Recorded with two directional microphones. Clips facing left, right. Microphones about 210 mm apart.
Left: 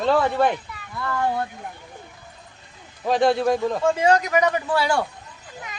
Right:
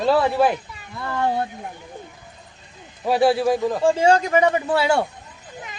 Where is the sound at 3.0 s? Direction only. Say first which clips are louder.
Right 1 dB; 5° right (ahead or behind).